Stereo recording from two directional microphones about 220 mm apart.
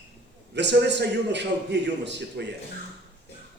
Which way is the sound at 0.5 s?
50° right (ahead or behind).